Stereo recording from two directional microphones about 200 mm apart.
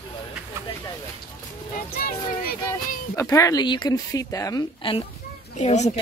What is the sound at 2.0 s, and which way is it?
Child singing, 50° left (ahead or behind).